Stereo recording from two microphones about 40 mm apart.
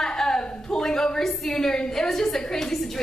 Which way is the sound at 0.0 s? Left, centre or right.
Centre.